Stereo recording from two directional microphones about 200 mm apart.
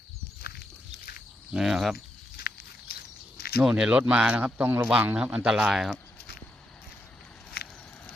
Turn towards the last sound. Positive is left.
turn(degrees=55)  # may be behind; listen again after turning